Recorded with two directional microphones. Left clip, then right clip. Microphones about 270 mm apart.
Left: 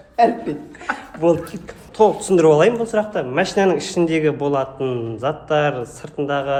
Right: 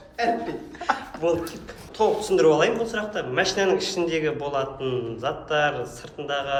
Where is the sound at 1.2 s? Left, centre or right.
Left.